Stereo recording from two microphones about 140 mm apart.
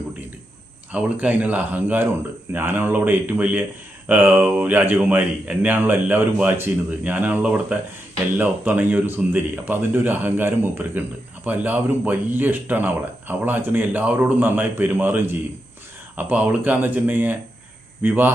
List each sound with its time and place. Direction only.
0.9 s speech: 10° right (ahead or behind)